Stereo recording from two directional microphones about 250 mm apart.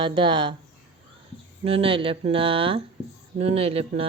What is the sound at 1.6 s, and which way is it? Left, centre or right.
Speech, right.